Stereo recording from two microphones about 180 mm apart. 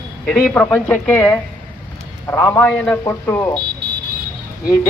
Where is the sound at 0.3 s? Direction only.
5° left (ahead or behind).